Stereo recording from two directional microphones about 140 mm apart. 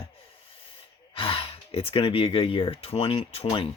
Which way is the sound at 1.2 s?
40° left (ahead or behind).